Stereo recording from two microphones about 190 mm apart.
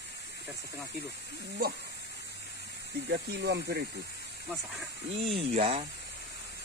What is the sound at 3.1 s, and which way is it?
Speech, 60° right (ahead or behind).